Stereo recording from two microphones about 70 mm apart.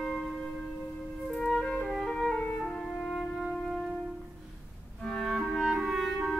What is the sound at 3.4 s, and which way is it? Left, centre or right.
Music, centre.